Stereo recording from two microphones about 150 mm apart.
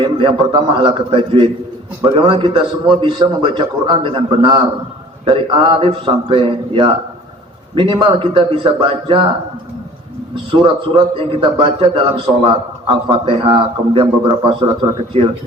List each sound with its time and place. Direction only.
0.0 s a man's voice: 35° right (ahead or behind)
10.5 s a man's voice: 35° right (ahead or behind)